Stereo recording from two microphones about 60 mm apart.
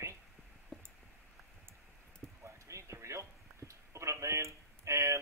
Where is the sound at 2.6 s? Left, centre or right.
Right.